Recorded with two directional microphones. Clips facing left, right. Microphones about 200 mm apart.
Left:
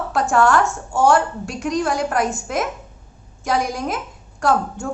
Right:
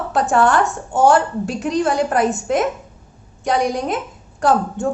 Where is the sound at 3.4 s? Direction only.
Centre (ahead or behind).